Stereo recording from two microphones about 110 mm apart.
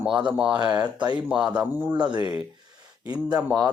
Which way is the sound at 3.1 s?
10° right (ahead or behind).